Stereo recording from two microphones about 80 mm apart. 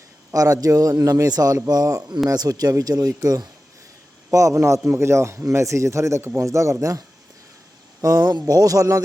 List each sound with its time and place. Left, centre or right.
0.3 s speech: right
8.0 s speech: right